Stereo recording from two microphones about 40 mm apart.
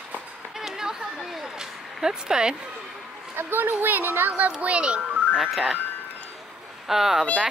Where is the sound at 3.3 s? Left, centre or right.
Right.